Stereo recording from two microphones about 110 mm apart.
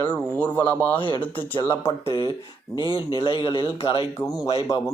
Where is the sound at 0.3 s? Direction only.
20° left (ahead or behind).